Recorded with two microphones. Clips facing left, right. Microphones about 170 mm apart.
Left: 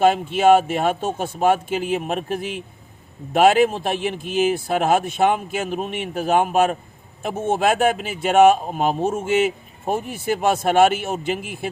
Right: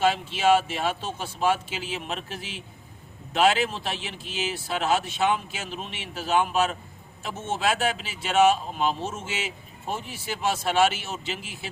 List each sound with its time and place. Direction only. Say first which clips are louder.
0.0 s speech: left 7 dB; 50° left (ahead or behind)